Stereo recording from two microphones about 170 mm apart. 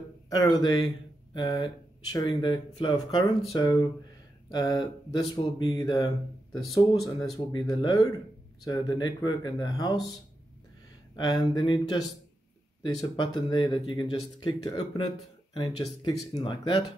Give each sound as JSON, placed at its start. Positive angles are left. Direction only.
{"t": 0.3, "sound": "speech", "side_deg": 20}
{"t": 7.2, "sound": "speech", "side_deg": 20}
{"t": 11.1, "sound": "speech", "side_deg": 25}